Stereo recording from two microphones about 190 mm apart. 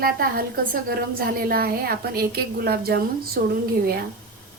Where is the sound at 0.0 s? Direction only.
50° right (ahead or behind).